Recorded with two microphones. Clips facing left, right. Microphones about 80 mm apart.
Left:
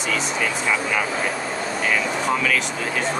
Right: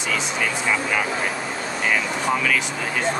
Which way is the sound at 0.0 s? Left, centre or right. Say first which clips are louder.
Left 1 dB; centre.